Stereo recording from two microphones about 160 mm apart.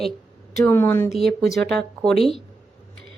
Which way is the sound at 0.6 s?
15° left (ahead or behind).